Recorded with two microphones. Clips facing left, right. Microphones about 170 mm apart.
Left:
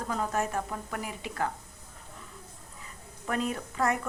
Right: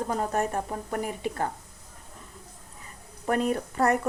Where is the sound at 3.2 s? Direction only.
50° right (ahead or behind).